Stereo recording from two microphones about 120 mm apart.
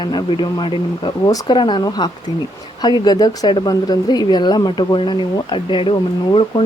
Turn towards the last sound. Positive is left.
turn(degrees=45)  # may be behind; listen again after turning